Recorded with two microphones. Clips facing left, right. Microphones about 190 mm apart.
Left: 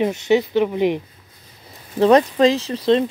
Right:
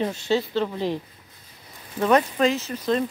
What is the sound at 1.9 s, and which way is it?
Speech, 30° left (ahead or behind).